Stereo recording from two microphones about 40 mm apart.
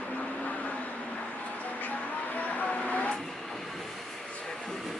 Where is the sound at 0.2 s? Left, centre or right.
Left.